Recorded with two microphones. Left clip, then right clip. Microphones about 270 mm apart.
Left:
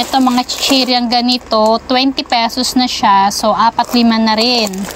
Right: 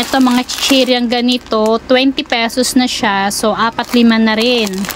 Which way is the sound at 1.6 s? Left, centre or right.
Right.